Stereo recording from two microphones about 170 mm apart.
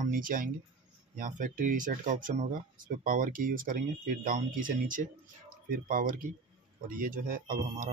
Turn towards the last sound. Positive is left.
turn(degrees=-55)  # may be behind; listen again after turning